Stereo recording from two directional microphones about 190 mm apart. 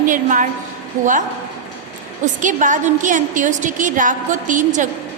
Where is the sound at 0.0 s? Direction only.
45° right (ahead or behind).